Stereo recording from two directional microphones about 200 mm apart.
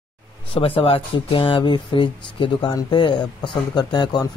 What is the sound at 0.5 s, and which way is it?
Speech, 30° left (ahead or behind).